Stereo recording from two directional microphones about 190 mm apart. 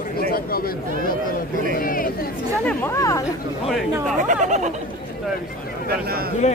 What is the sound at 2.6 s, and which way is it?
Speech, 15° left (ahead or behind).